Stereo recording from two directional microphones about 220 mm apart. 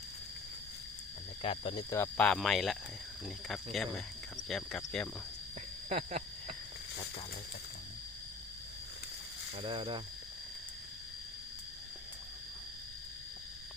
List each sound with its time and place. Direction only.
1.4 s speech: 25° left (ahead or behind)
1.9 s speech: 10° left (ahead or behind)
5.9 s a sound: 30° right (ahead or behind)
9.6 s speech: 20° right (ahead or behind)